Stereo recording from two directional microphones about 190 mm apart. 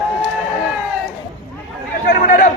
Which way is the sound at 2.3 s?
45° left (ahead or behind).